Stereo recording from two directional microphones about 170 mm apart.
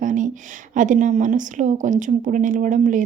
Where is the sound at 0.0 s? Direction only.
50° right (ahead or behind).